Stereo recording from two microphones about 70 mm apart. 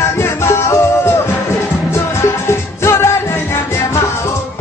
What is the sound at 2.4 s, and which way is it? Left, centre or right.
Music, left.